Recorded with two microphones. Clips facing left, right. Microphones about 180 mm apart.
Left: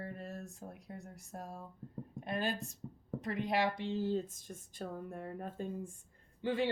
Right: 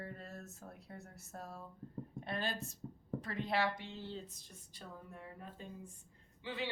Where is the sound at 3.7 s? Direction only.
40° left (ahead or behind).